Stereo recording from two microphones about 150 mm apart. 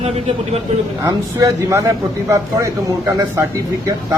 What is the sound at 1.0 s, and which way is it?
A man's voice, 25° right (ahead or behind).